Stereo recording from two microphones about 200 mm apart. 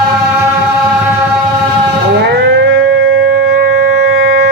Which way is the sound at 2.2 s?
55° right (ahead or behind).